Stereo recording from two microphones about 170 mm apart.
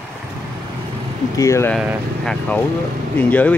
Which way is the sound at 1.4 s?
15° left (ahead or behind).